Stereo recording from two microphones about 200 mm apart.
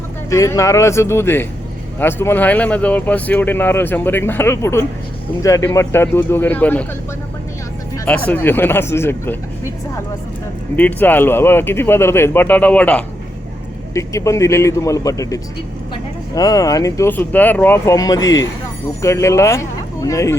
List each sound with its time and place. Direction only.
0.3 s speech: 15° left (ahead or behind)
7.9 s speech: 5° left (ahead or behind)
10.8 s speech: 10° left (ahead or behind)